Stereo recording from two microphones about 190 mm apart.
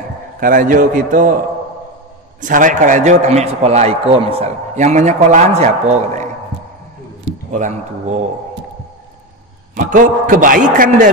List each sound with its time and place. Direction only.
0.4 s a man's voice: 45° right (ahead or behind)
2.4 s a man's voice: 45° right (ahead or behind)
7.5 s a man's voice: 40° right (ahead or behind)
9.8 s a man's voice: 45° right (ahead or behind)